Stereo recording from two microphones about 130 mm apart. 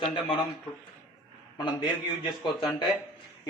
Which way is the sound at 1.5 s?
35° left (ahead or behind).